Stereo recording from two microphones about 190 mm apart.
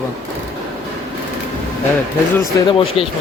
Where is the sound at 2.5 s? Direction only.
25° left (ahead or behind).